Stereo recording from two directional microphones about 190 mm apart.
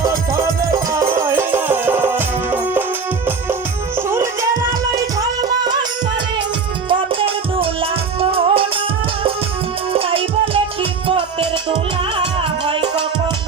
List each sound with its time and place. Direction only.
0.0 s music: 15° right (ahead or behind)
4.1 s music: 15° right (ahead or behind)
6.8 s music: 30° right (ahead or behind)
9.9 s music: 30° right (ahead or behind)